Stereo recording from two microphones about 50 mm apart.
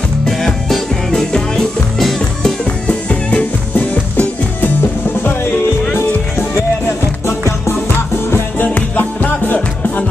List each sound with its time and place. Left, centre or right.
0.4 s music: centre
2.6 s music: left
3.7 s music: left
5.0 s music: left
7.2 s music: left
8.7 s music: left